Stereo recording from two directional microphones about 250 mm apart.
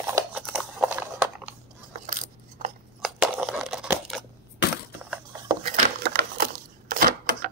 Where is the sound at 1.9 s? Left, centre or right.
Right.